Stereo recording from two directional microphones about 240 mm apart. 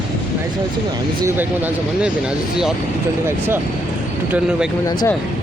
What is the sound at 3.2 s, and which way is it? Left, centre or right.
Speech, centre.